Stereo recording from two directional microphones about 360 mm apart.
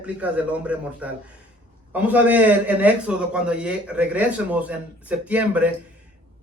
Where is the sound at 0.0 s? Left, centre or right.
Centre.